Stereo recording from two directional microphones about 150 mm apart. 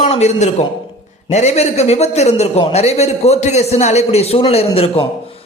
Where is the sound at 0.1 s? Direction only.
45° left (ahead or behind).